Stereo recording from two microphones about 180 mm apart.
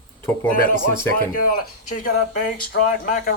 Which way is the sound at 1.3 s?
50° left (ahead or behind).